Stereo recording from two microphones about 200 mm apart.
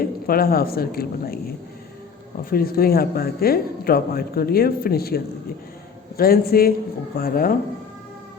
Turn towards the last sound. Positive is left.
turn(degrees=45)  # may be behind; listen again after turning